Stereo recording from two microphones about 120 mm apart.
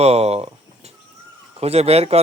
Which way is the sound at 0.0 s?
60° right (ahead or behind).